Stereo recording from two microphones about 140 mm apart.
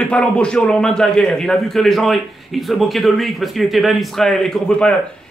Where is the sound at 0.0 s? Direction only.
10° left (ahead or behind).